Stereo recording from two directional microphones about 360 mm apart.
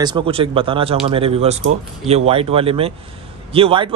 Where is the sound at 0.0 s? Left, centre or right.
Centre.